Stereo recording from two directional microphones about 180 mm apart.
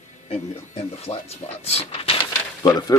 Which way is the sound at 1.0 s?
35° left (ahead or behind).